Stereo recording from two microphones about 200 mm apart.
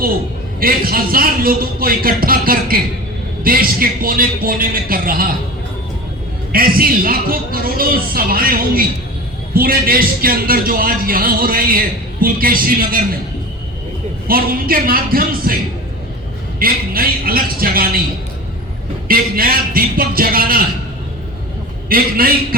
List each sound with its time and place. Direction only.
0.6 s a man's voice: 45° right (ahead or behind)
6.5 s a man's voice: 45° right (ahead or behind)
14.3 s a man's voice: 45° right (ahead or behind)
16.6 s a man's voice: 45° right (ahead or behind)
19.0 s a man's voice: 45° right (ahead or behind)
21.8 s a man's voice: 45° right (ahead or behind)